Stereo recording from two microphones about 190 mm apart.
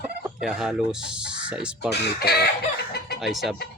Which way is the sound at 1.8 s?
60° left (ahead or behind).